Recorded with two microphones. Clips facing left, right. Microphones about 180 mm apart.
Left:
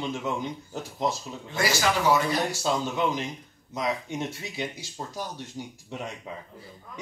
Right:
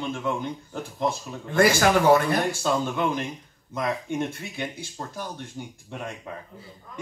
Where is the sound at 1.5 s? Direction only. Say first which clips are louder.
Right 7 dB; 55° right (ahead or behind).